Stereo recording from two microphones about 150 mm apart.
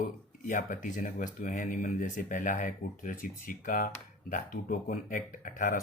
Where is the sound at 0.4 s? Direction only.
60° left (ahead or behind).